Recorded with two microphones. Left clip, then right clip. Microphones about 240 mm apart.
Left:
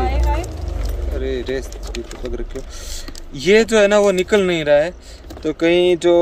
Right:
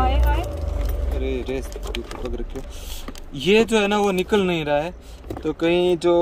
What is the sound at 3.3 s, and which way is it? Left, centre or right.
Speech, left.